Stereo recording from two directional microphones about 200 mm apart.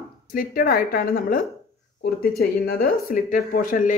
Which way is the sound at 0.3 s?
45° left (ahead or behind).